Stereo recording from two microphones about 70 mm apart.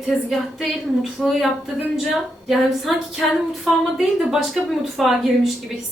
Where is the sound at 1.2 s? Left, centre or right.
Centre.